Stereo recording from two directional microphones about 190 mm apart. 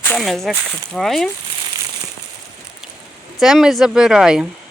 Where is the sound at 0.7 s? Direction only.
Centre (ahead or behind).